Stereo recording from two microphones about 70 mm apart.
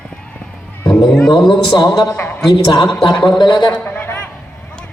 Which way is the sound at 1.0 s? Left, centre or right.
Centre.